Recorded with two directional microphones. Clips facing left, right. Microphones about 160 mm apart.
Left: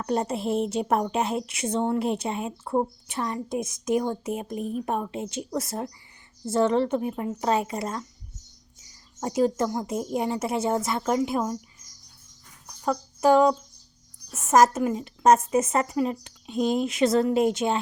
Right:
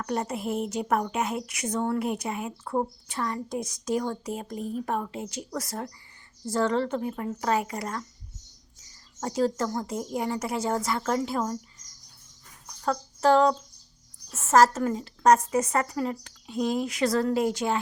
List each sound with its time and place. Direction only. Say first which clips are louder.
0.0 s a woman's voice: left 3 dB; 25° left (ahead or behind)
9.2 s a woman's voice: left 3 dB; 15° left (ahead or behind)
12.8 s a sound: left 2 dB; 15° left (ahead or behind)
14.3 s a woman's voice: left 1 dB; 15° left (ahead or behind)